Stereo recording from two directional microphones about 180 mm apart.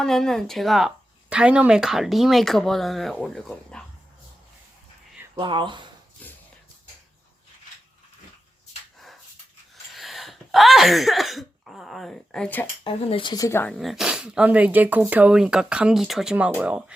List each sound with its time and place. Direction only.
0.0 s speech: 5° left (ahead or behind)
5.4 s speech: 25° right (ahead or behind)
6.2 s shuffle: 10° left (ahead or behind)
9.9 s cough: centre (ahead or behind)
12.8 s speech: 30° left (ahead or behind); by 13.7 s 15° left (ahead or behind)
13.7 s speech: 5° right (ahead or behind)